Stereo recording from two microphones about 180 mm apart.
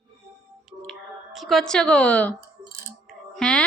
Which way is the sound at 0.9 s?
Centre (ahead or behind).